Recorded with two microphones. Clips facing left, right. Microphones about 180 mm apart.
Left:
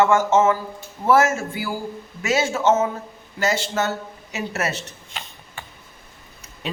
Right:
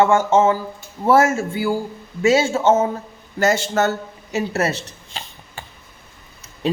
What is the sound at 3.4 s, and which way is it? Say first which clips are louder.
Speech: right 5 dB; 45° right (ahead or behind).